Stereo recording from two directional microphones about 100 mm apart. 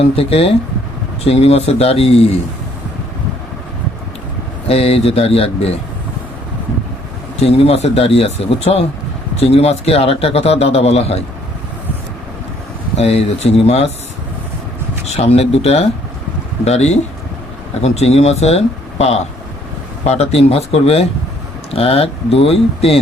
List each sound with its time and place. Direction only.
0.0 s speech: 75° left (ahead or behind)
1.2 s speech: 85° left
4.7 s a man's voice: 85° left
7.3 s a man's voice: 85° left
9.4 s a man's voice: 90° left
13.0 s speech: 90° left
15.1 s speech: 90° left
21.7 s speech: 70° left (ahead or behind)